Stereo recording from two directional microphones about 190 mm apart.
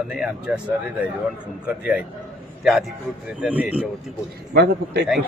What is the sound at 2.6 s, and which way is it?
A man's voice, centre (ahead or behind).